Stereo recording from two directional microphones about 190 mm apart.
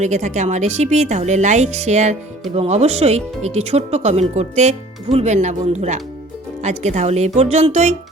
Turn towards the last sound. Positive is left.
turn(degrees=-35)  # may be behind; listen again after turning